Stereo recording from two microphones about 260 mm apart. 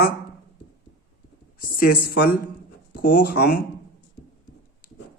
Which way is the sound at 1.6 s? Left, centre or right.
Left.